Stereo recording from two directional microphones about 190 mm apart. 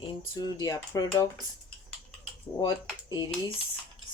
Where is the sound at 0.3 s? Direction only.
20° left (ahead or behind).